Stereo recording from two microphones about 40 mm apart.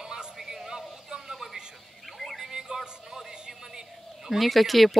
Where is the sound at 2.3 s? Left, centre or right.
Centre.